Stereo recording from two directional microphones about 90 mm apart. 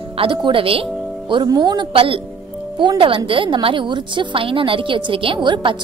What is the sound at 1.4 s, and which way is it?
Speech, 50° right (ahead or behind).